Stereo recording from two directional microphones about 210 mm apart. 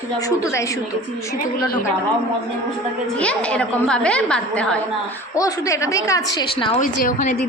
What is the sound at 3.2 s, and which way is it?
A woman's voice, 5° left (ahead or behind).